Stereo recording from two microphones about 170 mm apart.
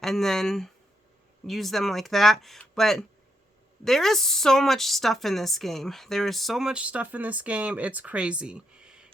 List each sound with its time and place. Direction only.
0.0 s a woman's voice: centre (ahead or behind)